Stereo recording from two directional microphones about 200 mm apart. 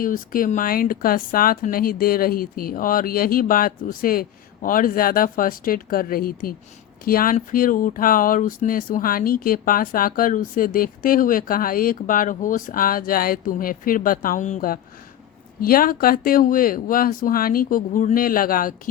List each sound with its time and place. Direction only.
0.0 s speech: 45° left (ahead or behind)